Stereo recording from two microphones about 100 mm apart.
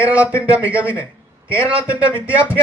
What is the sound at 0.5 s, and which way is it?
Speech, 15° right (ahead or behind).